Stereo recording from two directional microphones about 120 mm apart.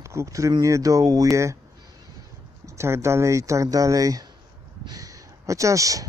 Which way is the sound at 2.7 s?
20° right (ahead or behind).